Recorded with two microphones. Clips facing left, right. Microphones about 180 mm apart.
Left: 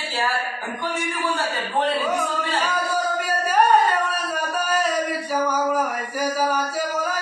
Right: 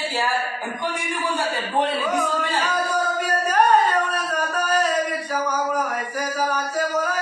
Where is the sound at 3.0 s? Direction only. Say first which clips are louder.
Right 1 dB; 10° left (ahead or behind).